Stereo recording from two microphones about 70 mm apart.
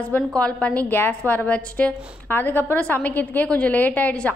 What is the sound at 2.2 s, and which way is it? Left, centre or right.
A woman's voice, left.